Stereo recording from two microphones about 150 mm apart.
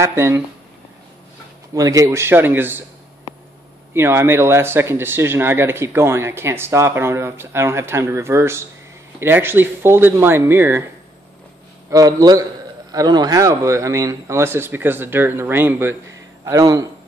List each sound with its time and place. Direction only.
0.0 s speech: 15° right (ahead or behind)
1.7 s speech: 25° right (ahead or behind)
3.9 s speech: 15° right (ahead or behind)
11.9 s a man's voice: 25° right (ahead or behind)